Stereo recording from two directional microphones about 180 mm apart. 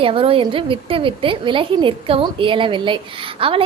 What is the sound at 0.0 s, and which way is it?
A woman's voice, 30° right (ahead or behind).